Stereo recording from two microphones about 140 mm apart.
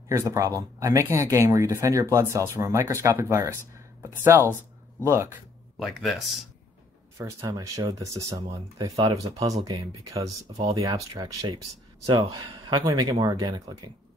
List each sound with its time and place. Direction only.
0.1 s speech: 20° right (ahead or behind)
5.8 s speech: centre (ahead or behind)
7.2 s speech: 25° right (ahead or behind)